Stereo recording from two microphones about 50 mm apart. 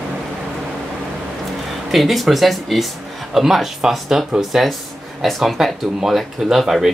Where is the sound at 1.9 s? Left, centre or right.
Centre.